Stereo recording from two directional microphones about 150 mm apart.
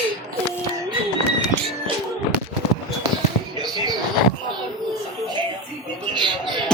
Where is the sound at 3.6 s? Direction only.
30° right (ahead or behind).